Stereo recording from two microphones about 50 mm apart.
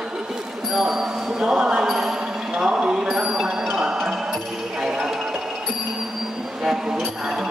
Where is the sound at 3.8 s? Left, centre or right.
Centre.